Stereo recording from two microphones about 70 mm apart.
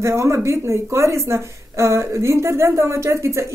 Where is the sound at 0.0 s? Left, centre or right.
Right.